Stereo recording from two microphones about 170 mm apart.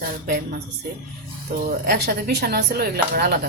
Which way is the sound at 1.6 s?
65° right (ahead or behind).